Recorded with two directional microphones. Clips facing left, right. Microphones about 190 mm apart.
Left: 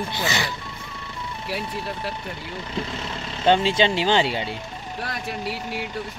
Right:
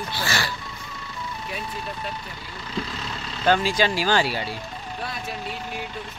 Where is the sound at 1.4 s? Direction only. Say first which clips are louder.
Left 5 dB; 75° left (ahead or behind).